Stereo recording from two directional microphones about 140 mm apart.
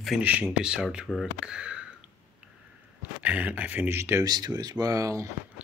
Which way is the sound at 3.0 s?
10° right (ahead or behind).